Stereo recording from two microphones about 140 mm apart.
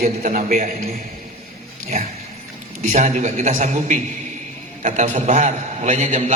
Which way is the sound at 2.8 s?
60° right (ahead or behind).